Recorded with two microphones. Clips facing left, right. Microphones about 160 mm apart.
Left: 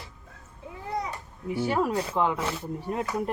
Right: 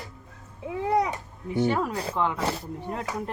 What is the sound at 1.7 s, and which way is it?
Speech, 10° left (ahead or behind).